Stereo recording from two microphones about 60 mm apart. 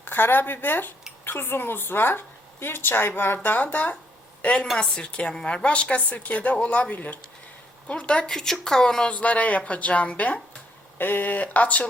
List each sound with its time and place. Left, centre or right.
0.0 s a woman's voice: left; by 9.0 s centre
9.0 s a woman's voice: left
10.9 s a woman's voice: left